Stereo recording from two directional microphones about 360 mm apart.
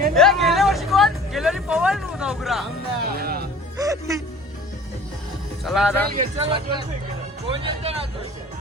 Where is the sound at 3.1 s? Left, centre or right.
Right.